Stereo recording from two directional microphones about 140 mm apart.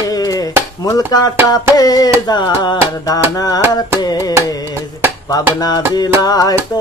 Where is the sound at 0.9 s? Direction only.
25° left (ahead or behind).